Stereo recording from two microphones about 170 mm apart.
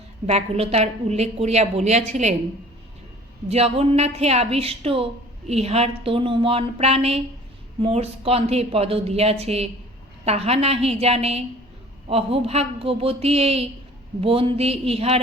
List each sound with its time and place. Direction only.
0.3 s a woman's voice: 35° right (ahead or behind)
3.5 s a woman's voice: 35° right (ahead or behind)